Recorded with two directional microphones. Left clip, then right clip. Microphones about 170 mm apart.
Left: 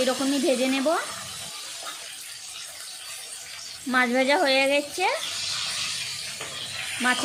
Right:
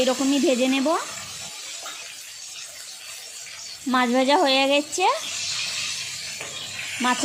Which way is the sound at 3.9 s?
30° right (ahead or behind).